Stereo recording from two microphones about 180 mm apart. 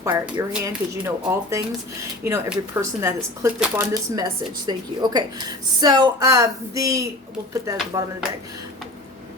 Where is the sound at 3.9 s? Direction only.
20° right (ahead or behind).